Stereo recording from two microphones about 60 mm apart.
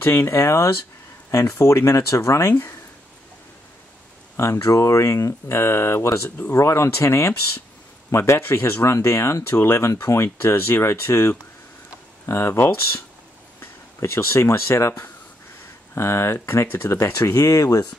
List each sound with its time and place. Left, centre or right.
0.0 s speech: left
4.4 s speech: left
17.5 s speech: left